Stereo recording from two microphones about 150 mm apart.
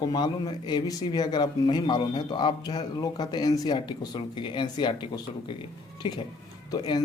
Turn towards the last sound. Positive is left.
turn(degrees=25)  # may be behind; listen again after turning